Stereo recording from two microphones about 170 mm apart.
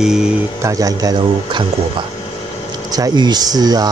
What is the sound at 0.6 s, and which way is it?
Speech, 20° right (ahead or behind).